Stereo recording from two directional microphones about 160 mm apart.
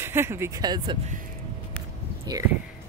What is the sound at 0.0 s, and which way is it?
Speech, 15° right (ahead or behind).